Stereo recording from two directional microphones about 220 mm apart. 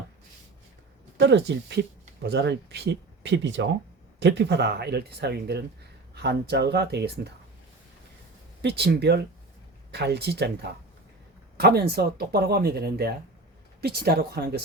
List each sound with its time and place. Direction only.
1.2 s speech: 50° right (ahead or behind)
8.6 s speech: 50° right (ahead or behind)